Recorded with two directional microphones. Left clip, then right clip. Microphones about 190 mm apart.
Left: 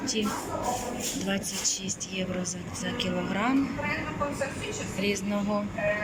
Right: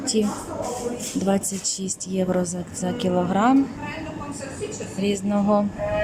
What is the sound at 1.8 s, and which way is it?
Speech, 25° right (ahead or behind).